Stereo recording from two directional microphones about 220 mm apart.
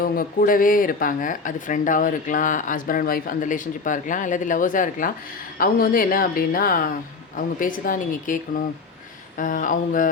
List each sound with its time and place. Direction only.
0.0 s speech: 40° left (ahead or behind)